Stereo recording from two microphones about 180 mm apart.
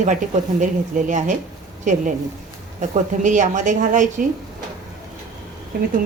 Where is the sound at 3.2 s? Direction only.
45° right (ahead or behind).